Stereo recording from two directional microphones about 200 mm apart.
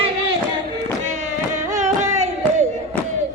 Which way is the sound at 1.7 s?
35° right (ahead or behind).